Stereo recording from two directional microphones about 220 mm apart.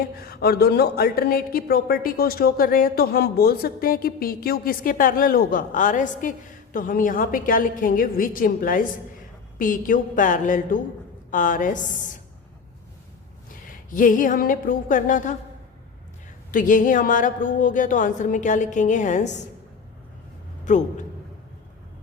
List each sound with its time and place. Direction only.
0.0 s a sound: 45° left (ahead or behind)
6.7 s speech: 40° left (ahead or behind)
13.9 s speech: 35° left (ahead or behind)
16.5 s speech: 35° left (ahead or behind)
20.7 s speech: 35° left (ahead or behind)